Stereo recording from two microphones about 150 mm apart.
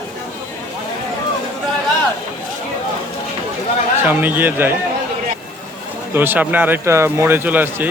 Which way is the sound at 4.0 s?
10° right (ahead or behind).